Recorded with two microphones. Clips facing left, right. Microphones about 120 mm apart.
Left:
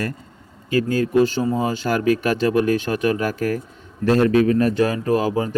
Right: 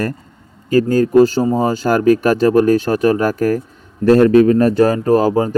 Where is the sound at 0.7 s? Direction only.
40° right (ahead or behind).